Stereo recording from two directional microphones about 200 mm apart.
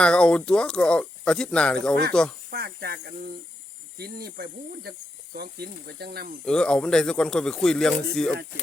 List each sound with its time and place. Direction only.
0.0 s speech: 5° left (ahead or behind)
2.5 s speech: 50° right (ahead or behind)
6.4 s speech: 5° left (ahead or behind)